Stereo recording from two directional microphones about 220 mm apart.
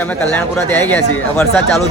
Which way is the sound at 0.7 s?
5° left (ahead or behind).